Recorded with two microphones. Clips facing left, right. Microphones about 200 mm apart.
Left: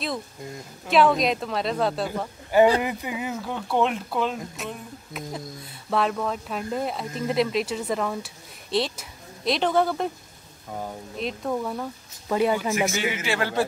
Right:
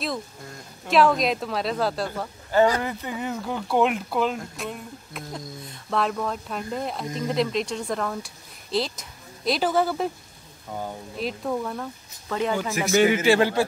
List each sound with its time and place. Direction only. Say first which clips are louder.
0.8 s speech: even; centre (ahead or behind)
2.0 s speech: left 2 dB; 10° left (ahead or behind)
12.9 s speech: right 9 dB; 50° right (ahead or behind)